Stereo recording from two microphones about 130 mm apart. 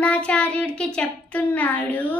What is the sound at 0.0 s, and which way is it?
Child singing, 10° left (ahead or behind).